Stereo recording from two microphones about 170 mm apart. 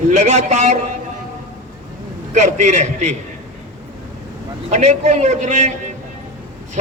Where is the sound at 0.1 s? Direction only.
45° right (ahead or behind).